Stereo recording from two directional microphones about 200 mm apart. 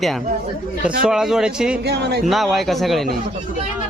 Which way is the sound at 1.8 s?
55° right (ahead or behind).